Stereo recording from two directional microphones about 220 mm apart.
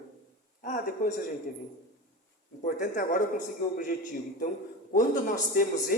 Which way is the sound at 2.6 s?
40° left (ahead or behind).